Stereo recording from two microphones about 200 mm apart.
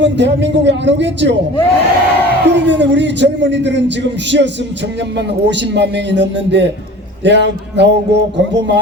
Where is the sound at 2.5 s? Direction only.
60° right (ahead or behind).